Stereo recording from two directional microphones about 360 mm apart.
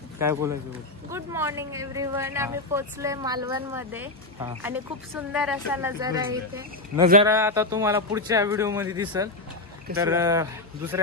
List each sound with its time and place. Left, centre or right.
0.2 s speech: centre